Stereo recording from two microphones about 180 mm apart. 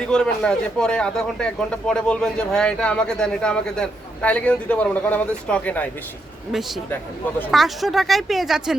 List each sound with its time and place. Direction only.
0.1 s speech: 5° left (ahead or behind)